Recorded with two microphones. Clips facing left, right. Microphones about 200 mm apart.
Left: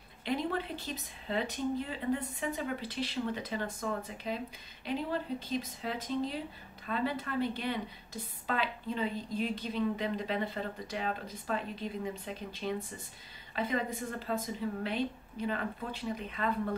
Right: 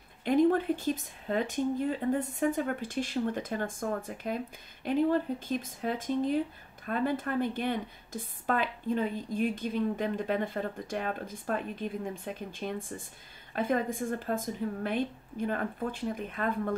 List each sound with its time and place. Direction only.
0.2 s a woman's voice: 50° right (ahead or behind)